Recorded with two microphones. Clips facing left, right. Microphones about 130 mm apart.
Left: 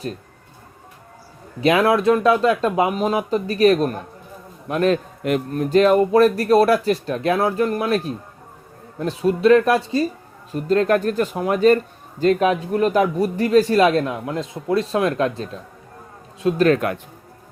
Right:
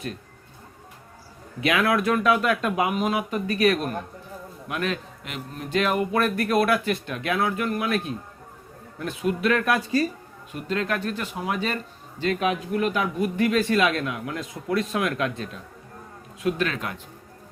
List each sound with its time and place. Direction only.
1.6 s a man's voice: 30° left (ahead or behind)
10.5 s a man's voice: 40° left (ahead or behind)
16.6 s speech: 55° left (ahead or behind)